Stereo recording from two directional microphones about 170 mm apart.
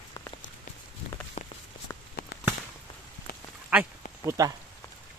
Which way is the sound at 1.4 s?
40° left (ahead or behind).